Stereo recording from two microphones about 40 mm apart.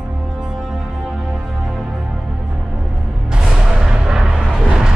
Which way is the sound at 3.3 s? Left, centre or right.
Centre.